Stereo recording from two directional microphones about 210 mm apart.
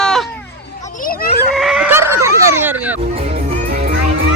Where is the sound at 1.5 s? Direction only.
Centre (ahead or behind).